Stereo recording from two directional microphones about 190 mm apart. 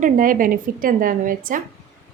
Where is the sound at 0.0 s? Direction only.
45° right (ahead or behind).